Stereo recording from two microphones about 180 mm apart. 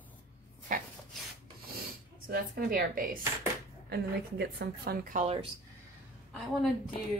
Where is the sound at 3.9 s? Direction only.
65° right (ahead or behind).